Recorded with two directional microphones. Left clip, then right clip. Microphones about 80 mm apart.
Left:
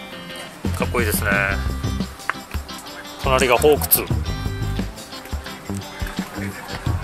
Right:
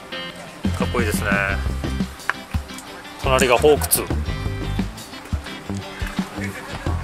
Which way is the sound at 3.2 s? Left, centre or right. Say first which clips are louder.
Even; centre.